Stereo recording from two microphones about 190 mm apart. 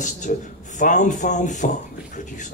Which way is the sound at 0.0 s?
40° left (ahead or behind).